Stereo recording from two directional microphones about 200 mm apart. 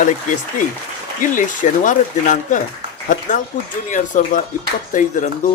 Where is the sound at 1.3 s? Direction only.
40° left (ahead or behind).